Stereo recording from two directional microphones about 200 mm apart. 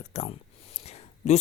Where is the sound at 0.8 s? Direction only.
35° left (ahead or behind).